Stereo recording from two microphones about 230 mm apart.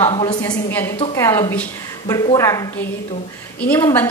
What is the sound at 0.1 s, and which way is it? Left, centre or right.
A woman's voice, centre.